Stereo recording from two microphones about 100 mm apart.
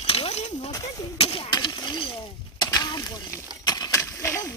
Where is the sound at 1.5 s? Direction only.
45° left (ahead or behind).